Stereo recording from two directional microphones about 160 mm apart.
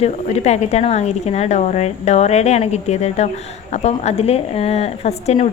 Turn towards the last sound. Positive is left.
turn(degrees=45)  # may be behind; listen again after turning